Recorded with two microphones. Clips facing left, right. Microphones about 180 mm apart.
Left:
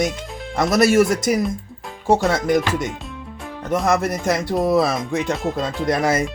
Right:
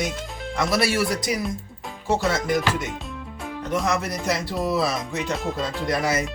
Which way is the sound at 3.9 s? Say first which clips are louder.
Left 8 dB; 50° left (ahead or behind).